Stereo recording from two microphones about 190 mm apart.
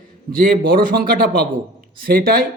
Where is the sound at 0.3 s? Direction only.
45° right (ahead or behind).